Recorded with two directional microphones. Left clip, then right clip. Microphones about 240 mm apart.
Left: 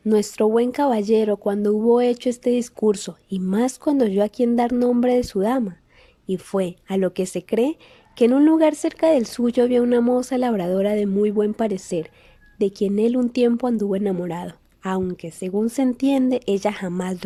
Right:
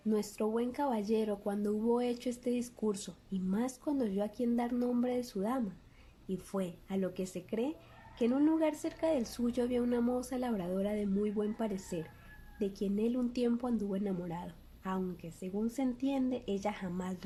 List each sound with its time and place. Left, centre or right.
0.1 s speech: left